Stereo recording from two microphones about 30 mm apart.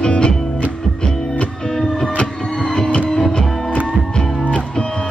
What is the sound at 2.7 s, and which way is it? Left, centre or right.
Music, left.